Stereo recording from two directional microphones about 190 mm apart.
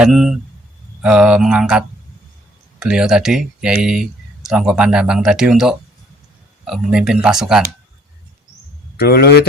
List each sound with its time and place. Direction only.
0.0 s speech: centre (ahead or behind)
9.0 s speech: 55° left (ahead or behind)